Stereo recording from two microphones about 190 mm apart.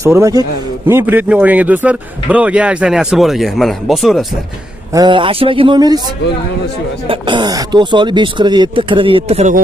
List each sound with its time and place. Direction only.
0.0 s a man's voice: 15° right (ahead or behind); by 4.3 s centre (ahead or behind)
4.9 s speech: 25° right (ahead or behind)
7.1 s speech: 25° right (ahead or behind)